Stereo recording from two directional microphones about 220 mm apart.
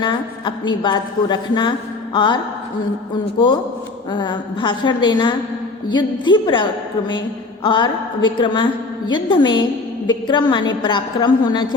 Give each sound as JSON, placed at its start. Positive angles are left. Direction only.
{"t": 0.0, "sound": "a woman's voice", "side_deg": 20}
{"t": 4.1, "sound": "a woman's voice", "side_deg": 20}